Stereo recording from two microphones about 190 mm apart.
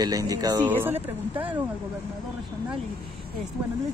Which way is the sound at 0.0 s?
20° right (ahead or behind).